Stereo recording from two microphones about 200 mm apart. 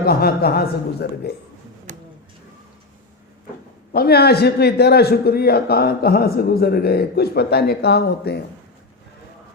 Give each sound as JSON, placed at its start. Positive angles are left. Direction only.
{"t": 0.0, "sound": "a man's voice", "side_deg": 50}
{"t": 1.9, "sound": "a sound", "side_deg": -35}
{"t": 3.9, "sound": "a man's voice", "side_deg": 50}